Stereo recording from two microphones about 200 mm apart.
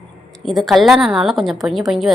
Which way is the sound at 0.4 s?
Centre (ahead or behind).